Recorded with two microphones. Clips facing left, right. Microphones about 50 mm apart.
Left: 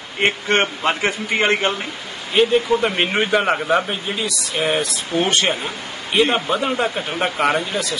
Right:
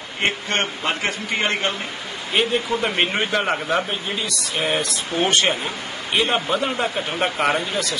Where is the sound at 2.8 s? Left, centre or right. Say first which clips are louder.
Left 2 dB; centre.